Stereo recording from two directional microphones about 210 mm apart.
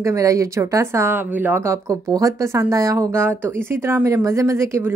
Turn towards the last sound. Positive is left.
turn(degrees=-15)  # may be behind; listen again after turning